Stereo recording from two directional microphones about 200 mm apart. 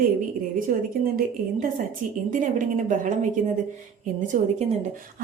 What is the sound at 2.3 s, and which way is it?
A woman's voice, 40° right (ahead or behind).